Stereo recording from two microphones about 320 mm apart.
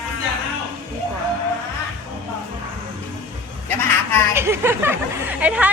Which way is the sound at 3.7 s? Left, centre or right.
Centre.